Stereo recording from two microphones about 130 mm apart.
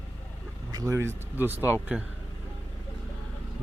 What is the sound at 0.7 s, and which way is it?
Speech, 25° right (ahead or behind).